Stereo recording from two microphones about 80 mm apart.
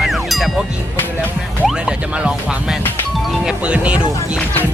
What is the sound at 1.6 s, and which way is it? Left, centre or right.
Speech, centre.